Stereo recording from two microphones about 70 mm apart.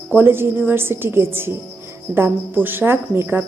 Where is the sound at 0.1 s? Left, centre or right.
Right.